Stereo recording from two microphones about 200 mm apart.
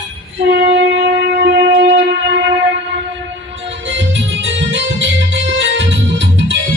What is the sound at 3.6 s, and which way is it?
Music, 65° right (ahead or behind).